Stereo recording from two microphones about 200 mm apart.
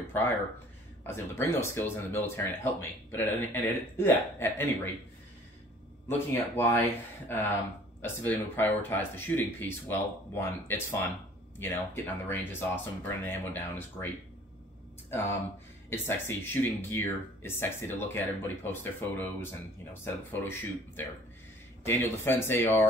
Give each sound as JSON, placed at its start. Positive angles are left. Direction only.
{"t": 0.0, "sound": "speech", "side_deg": 10}
{"t": 6.0, "sound": "speech", "side_deg": 10}